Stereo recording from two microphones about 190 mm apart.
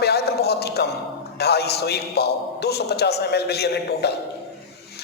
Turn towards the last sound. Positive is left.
turn(degrees=60)  # may be behind; listen again after turning